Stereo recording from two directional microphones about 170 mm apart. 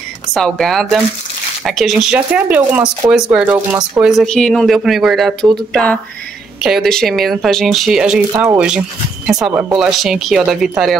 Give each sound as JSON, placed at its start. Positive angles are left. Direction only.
{"t": 0.3, "sound": "speech", "side_deg": 5}
{"t": 9.5, "sound": "speech", "side_deg": -15}
{"t": 9.8, "sound": "speech", "side_deg": 0}